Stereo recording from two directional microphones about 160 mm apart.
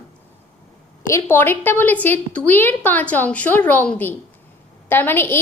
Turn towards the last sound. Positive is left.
turn(degrees=15)  # may be behind; listen again after turning